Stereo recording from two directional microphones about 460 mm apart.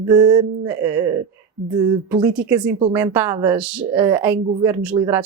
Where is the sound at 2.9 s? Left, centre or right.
Centre.